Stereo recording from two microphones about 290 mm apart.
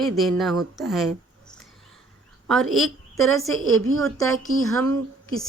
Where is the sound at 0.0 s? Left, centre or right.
Centre.